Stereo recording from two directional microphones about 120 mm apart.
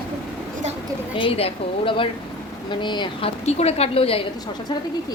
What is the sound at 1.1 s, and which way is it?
A woman's voice, 50° left (ahead or behind).